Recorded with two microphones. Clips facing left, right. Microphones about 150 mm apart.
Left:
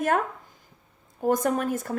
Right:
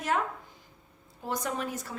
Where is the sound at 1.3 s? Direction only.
50° left (ahead or behind).